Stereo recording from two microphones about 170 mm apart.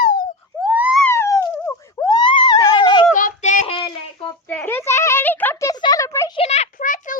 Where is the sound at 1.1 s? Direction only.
20° left (ahead or behind).